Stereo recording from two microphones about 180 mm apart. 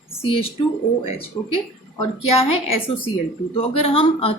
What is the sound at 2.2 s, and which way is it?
A woman's voice, 35° left (ahead or behind).